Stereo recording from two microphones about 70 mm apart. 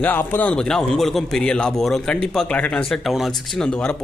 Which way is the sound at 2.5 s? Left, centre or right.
Centre.